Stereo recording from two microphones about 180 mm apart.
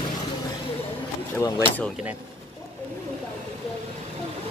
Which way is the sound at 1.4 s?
15° left (ahead or behind).